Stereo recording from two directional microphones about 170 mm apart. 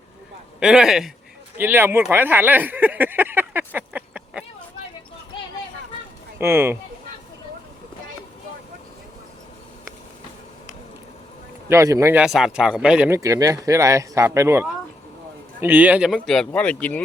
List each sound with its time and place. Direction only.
0.6 s speech: 5° right (ahead or behind)
2.1 s a sound: 10° right (ahead or behind)
6.4 s speech: 15° right (ahead or behind)
11.7 s speech: 20° right (ahead or behind)
12.2 s speech: centre (ahead or behind)